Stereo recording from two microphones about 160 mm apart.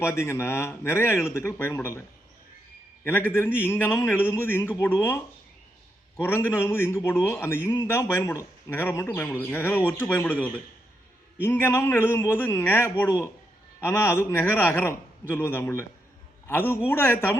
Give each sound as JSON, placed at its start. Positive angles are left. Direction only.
{"t": 0.0, "sound": "a man's voice", "side_deg": 15}
{"t": 6.2, "sound": "a man's voice", "side_deg": 15}
{"t": 11.4, "sound": "a man's voice", "side_deg": 15}